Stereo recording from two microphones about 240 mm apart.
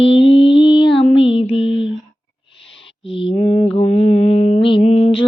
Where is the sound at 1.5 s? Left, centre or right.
Left.